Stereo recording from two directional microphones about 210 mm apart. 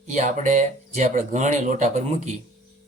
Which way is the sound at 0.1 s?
35° right (ahead or behind).